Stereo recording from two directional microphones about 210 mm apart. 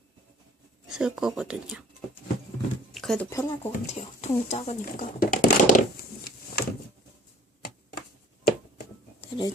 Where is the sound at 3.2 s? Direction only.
15° left (ahead or behind).